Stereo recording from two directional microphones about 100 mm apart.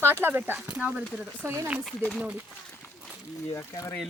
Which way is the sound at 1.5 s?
25° right (ahead or behind).